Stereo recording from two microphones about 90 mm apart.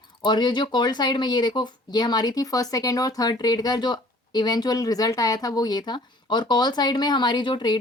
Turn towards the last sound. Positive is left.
turn(degrees=55)  # may be behind; listen again after turning